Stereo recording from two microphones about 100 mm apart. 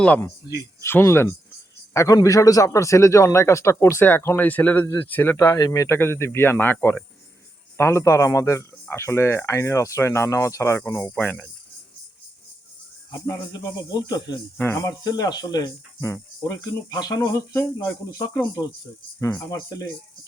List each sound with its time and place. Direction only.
0.4 s speech: 30° left (ahead or behind)
5.5 s speech: 35° left (ahead or behind)
11.1 s speech: 15° left (ahead or behind)
13.1 s speech: 35° left (ahead or behind)
14.6 s speech: 25° left (ahead or behind)
14.8 s speech: 40° left (ahead or behind)